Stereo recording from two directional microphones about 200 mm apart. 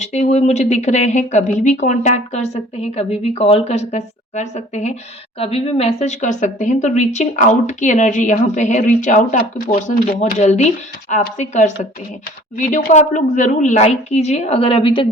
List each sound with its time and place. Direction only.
0.0 s speech: 35° left (ahead or behind)